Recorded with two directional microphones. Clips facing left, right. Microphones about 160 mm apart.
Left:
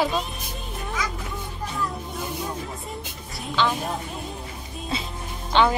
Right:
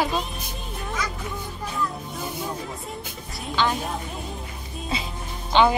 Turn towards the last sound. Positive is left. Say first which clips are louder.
# right 1 dB
turn(degrees=0)  # may be behind; listen again after turning